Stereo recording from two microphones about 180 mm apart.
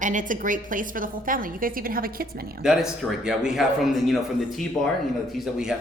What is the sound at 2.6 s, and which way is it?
Speech, centre (ahead or behind).